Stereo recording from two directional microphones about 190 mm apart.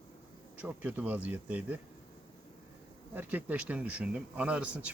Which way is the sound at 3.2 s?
10° right (ahead or behind).